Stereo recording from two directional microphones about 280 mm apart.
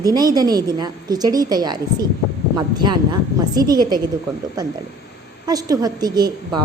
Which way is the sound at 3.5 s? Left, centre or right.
Centre.